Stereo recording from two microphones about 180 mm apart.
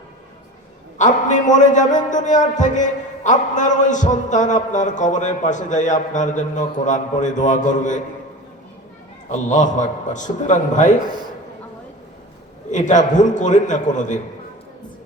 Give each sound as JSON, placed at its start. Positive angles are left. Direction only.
{"t": 0.9, "sound": "a man's voice", "side_deg": 45}
{"t": 9.3, "sound": "a man's voice", "side_deg": 45}
{"t": 12.7, "sound": "a man's voice", "side_deg": 45}